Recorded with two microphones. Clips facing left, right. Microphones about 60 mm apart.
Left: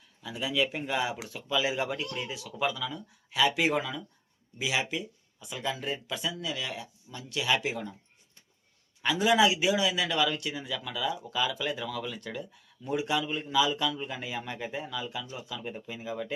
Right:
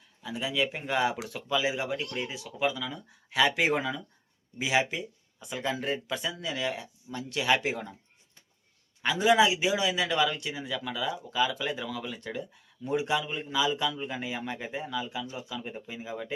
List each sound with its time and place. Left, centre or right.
0.2 s a man's voice: right
0.9 s speech: right
1.5 s a man's voice: right
2.6 s speech: centre
3.2 s speech: right
9.0 s a man's voice: right
13.2 s speech: centre
13.5 s a man's voice: right